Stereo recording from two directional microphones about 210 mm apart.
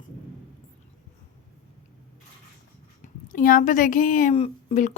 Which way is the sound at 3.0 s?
40° left (ahead or behind).